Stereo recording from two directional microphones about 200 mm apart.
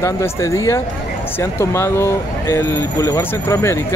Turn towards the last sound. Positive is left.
turn(degrees=15)  # may be behind; listen again after turning